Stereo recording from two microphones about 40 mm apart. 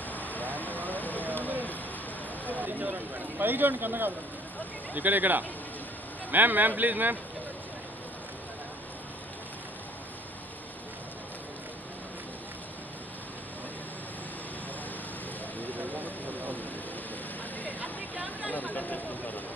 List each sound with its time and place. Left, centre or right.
0.1 s vehicle: left
0.8 s fire: left
2.5 s a sound: right
3.3 s speech: right
4.9 s a man's voice: right
15.7 s vehicle: right
18.5 s a sound: left